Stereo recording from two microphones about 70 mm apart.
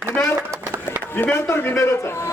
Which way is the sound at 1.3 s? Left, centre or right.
Left.